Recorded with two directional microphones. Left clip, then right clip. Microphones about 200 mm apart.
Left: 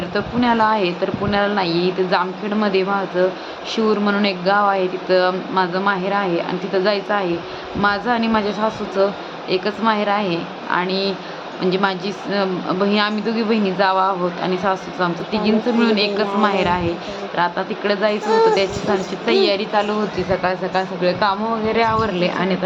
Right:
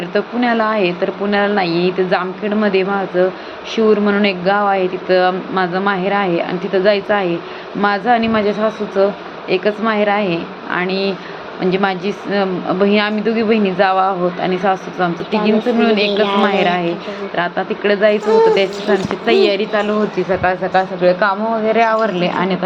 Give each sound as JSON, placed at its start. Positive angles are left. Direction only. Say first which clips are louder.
{"t": 0.1, "sound": "speech", "louder": "right 3 dB", "side_deg": -5}